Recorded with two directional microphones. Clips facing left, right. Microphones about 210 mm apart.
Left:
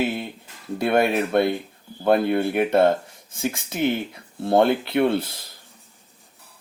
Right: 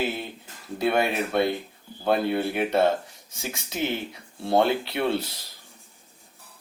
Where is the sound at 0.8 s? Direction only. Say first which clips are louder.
Left 4 dB; 55° left (ahead or behind).